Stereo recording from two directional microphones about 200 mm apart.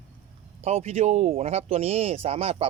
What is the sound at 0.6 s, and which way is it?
Speech, 30° right (ahead or behind).